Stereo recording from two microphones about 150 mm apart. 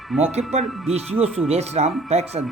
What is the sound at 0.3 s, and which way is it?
Speech, 45° right (ahead or behind).